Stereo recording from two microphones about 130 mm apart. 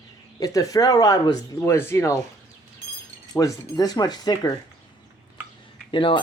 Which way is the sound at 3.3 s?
25° left (ahead or behind).